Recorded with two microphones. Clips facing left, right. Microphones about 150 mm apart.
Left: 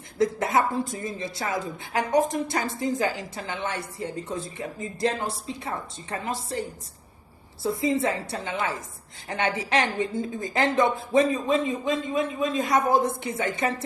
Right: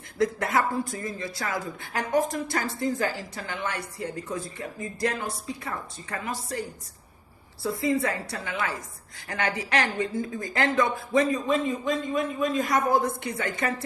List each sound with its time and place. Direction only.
0.5 s a woman's voice: 25° left (ahead or behind)